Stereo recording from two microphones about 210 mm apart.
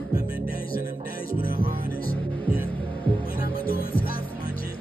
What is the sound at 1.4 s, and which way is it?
Music, 45° left (ahead or behind).